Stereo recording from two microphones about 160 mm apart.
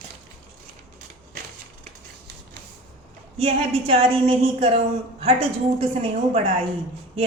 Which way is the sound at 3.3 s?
40° right (ahead or behind).